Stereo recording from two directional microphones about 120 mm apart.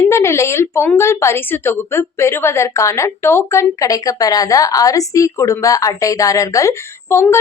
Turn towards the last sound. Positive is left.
turn(degrees=20)  # may be behind; listen again after turning